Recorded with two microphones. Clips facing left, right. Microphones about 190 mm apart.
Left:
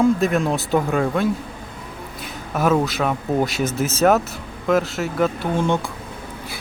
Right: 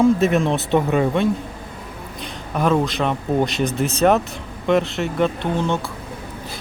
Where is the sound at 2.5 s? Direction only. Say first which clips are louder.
Even; 5° left (ahead or behind).